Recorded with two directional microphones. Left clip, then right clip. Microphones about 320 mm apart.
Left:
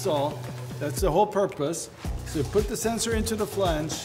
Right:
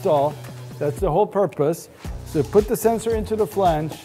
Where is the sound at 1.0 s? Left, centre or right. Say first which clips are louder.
Right 3 dB; right.